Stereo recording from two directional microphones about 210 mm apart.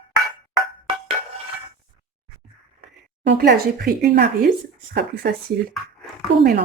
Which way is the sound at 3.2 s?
50° right (ahead or behind).